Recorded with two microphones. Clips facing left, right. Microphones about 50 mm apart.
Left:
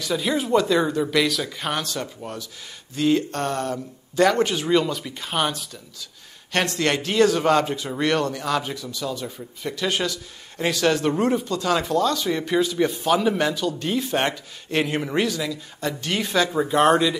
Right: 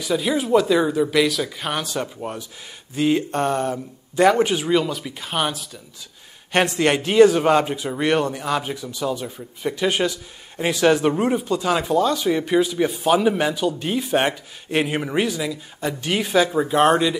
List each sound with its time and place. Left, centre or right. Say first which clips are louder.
0.0 s speech: right 2 dB; centre
1.9 s a man's voice: right 4 dB; centre
6.5 s a man's voice: right 4 dB; centre